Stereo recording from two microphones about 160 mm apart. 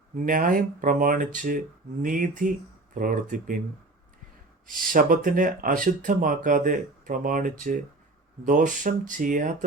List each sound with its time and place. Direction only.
0.3 s speech: 55° right (ahead or behind)
4.6 s speech: 60° right (ahead or behind)